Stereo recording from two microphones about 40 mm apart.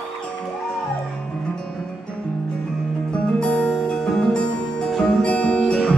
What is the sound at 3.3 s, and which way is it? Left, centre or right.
Music, left.